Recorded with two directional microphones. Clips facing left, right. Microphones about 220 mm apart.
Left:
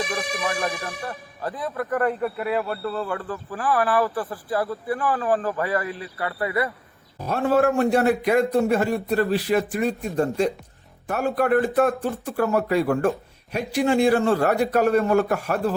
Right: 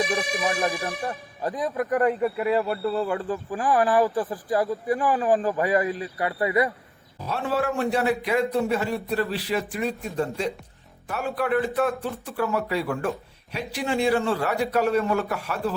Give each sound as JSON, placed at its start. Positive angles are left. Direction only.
{"t": 0.2, "sound": "speech", "side_deg": -15}
{"t": 7.2, "sound": "speech", "side_deg": 45}